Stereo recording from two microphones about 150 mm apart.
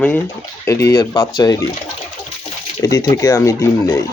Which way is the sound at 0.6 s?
20° left (ahead or behind).